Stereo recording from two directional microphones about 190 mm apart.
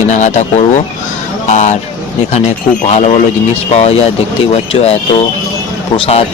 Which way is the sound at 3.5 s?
35° left (ahead or behind).